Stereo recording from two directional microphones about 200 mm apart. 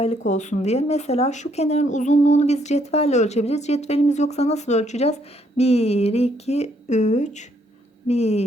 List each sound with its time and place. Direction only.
0.0 s speech: 35° left (ahead or behind)